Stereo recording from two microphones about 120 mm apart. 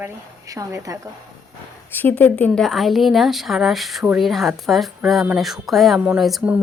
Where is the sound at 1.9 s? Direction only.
15° left (ahead or behind); by 6.6 s 5° right (ahead or behind).